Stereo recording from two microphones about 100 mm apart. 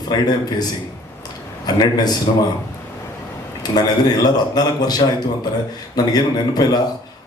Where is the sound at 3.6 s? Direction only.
40° left (ahead or behind).